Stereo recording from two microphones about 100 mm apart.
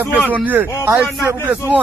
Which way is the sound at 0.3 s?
15° right (ahead or behind).